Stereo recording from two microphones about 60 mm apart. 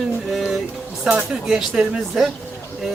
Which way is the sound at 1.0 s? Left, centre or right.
Centre.